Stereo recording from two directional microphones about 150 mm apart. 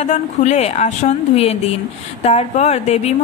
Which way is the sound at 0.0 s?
50° left (ahead or behind).